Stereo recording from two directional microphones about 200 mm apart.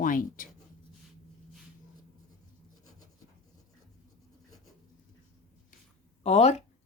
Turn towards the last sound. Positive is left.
turn(degrees=35)  # may be behind; listen again after turning